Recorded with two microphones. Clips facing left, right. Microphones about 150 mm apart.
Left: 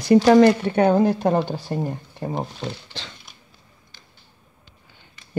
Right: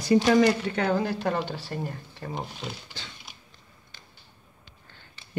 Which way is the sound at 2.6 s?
90° left.